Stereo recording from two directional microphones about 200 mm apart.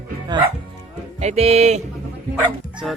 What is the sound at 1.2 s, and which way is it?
Speech, 30° right (ahead or behind).